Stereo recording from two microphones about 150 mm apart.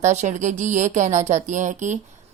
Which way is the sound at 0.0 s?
50° right (ahead or behind).